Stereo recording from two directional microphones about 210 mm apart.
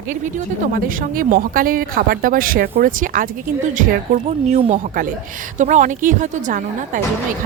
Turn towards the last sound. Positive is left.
turn(degrees=-40)  # may be behind; listen again after turning